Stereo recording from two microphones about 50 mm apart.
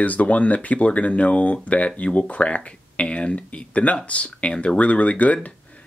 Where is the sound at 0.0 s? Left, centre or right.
Left.